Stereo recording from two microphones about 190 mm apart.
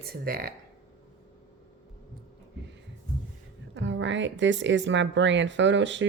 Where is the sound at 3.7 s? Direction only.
75° right (ahead or behind).